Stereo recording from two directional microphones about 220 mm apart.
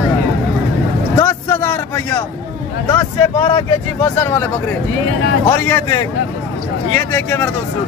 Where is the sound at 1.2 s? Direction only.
15° left (ahead or behind).